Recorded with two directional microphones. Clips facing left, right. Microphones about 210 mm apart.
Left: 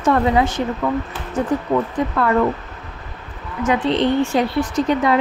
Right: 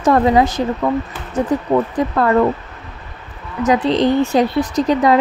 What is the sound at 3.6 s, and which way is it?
A woman's voice, 40° right (ahead or behind).